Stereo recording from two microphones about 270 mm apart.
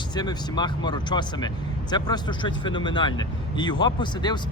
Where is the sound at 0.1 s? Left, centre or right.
Centre.